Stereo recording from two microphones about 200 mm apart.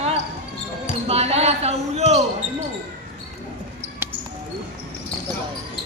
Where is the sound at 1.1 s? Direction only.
30° right (ahead or behind).